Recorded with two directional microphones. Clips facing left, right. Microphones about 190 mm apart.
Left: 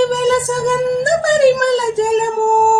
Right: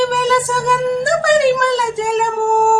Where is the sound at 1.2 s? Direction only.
40° left (ahead or behind).